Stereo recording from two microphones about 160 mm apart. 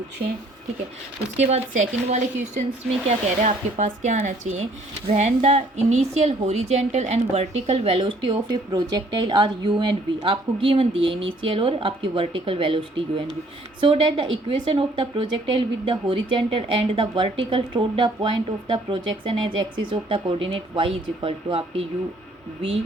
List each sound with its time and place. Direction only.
1.4 s a woman's voice: 40° right (ahead or behind)